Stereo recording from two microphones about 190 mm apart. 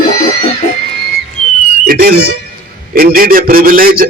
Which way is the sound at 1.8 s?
50° right (ahead or behind).